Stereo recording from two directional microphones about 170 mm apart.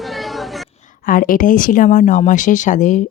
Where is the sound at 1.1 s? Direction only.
55° left (ahead or behind).